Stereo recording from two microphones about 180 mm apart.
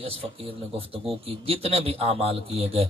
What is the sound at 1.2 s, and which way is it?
A man's voice, 30° right (ahead or behind).